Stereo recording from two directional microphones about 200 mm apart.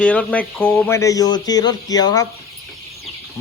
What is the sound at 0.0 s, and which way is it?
Speech, 5° left (ahead or behind).